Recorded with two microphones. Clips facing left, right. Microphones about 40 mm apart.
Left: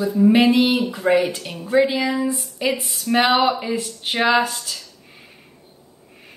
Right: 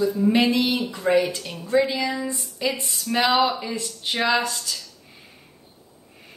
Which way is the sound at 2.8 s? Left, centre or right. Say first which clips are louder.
Left 1 dB; centre.